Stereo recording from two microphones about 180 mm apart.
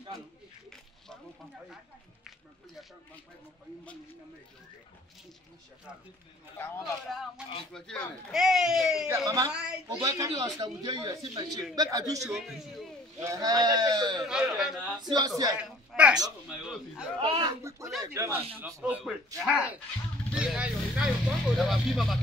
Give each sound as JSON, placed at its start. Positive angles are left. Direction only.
{"t": 7.1, "sound": "speech", "side_deg": 0}
{"t": 9.0, "sound": "a man's voice", "side_deg": -20}
{"t": 12.3, "sound": "speech", "side_deg": 0}
{"t": 13.2, "sound": "a man's voice", "side_deg": -20}
{"t": 14.2, "sound": "speech", "side_deg": -5}
{"t": 15.0, "sound": "a man's voice", "side_deg": -25}
{"t": 15.5, "sound": "a woman's voice", "side_deg": -5}
{"t": 17.2, "sound": "a man's voice", "side_deg": -25}